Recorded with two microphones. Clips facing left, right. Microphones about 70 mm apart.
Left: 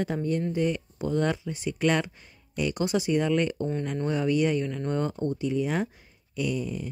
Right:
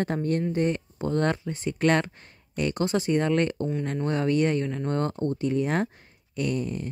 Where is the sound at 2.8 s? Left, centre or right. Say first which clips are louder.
Right 1 dB; centre.